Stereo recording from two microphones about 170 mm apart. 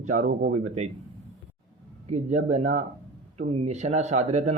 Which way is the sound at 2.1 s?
40° right (ahead or behind).